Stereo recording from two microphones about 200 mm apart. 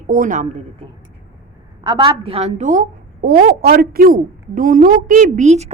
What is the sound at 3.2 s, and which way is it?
A woman's voice, 50° right (ahead or behind).